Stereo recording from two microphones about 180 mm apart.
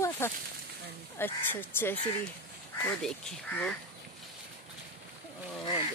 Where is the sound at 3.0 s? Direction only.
5° left (ahead or behind).